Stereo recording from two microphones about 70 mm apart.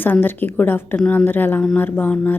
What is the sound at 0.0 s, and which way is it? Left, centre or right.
A woman's voice, left.